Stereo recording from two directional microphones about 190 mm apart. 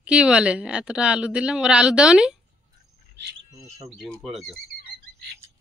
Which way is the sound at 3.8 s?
Centre (ahead or behind).